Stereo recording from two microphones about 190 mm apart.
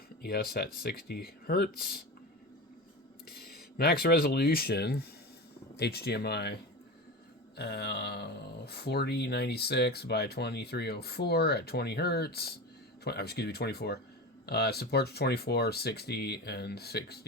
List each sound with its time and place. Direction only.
0.2 s speech: 55° left (ahead or behind)
3.2 s speech: 55° left (ahead or behind)